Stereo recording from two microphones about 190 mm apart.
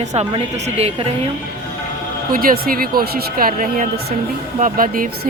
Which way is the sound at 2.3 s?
50° right (ahead or behind).